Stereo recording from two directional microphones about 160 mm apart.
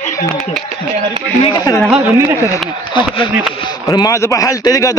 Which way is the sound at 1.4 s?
25° left (ahead or behind).